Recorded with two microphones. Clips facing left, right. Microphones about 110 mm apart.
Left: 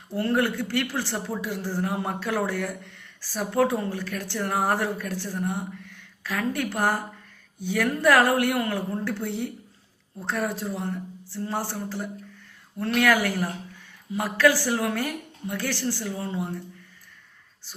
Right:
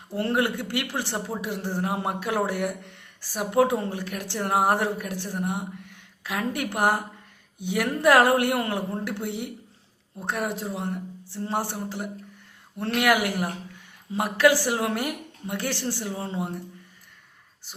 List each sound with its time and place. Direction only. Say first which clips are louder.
0.1 s speech: left 1 dB; 25° right (ahead or behind)